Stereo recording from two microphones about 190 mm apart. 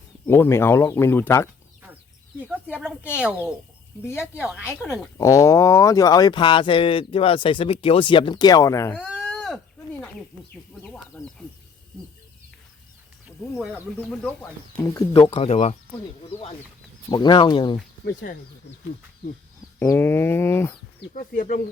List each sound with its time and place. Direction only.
0.3 s speech: 15° left (ahead or behind)
2.5 s speech: 5° right (ahead or behind)
5.1 s speech: 15° left (ahead or behind)
9.0 s a sound: centre (ahead or behind)
10.8 s speech: 5° left (ahead or behind)
13.2 s speech: 5° right (ahead or behind)
14.8 s speech: 15° left (ahead or behind)
15.4 s speech: 35° left (ahead or behind)
17.1 s speech: 25° left (ahead or behind)
18.0 s speech: 55° left (ahead or behind)
19.8 s speech: 10° left (ahead or behind)
21.1 s speech: 45° left (ahead or behind)